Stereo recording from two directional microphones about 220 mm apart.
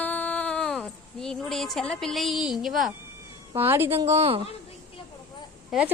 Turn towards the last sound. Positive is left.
turn(degrees=0)  # may be behind; listen again after turning